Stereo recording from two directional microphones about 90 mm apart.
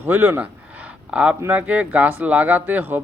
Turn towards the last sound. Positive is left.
turn(degrees=-20)  # may be behind; listen again after turning